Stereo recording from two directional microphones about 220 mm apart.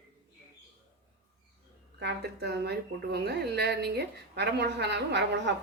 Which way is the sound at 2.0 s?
50° right (ahead or behind).